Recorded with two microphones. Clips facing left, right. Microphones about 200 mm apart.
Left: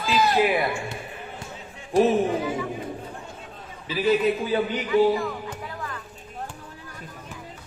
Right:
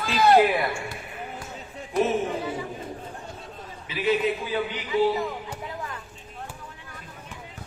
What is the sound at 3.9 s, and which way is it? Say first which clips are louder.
Speech: left 3 dB; 40° left (ahead or behind).